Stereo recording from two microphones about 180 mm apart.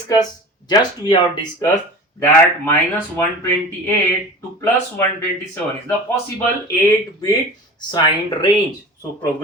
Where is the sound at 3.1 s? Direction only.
15° left (ahead or behind).